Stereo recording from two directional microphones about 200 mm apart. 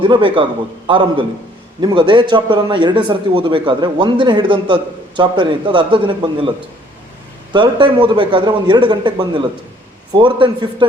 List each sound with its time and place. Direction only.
0.0 s speech: 25° right (ahead or behind)
7.5 s speech: 25° right (ahead or behind)